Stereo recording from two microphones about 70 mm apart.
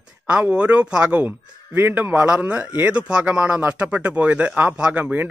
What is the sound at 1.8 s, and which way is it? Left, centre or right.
Speech, right.